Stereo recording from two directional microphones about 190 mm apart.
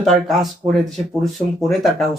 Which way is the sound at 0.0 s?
Centre (ahead or behind).